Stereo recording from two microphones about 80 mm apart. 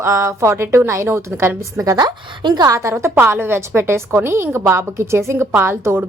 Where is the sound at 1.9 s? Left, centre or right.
Right.